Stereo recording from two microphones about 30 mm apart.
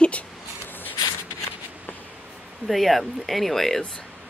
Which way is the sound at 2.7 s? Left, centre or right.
Centre.